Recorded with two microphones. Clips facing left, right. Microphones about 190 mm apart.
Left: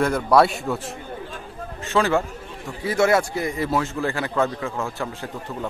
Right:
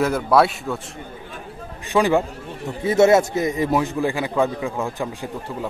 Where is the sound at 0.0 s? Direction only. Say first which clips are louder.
Even; 5° right (ahead or behind).